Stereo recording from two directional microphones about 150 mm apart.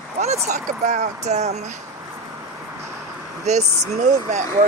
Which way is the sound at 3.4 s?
50° right (ahead or behind).